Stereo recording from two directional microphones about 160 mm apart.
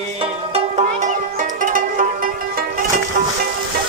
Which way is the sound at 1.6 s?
60° right (ahead or behind).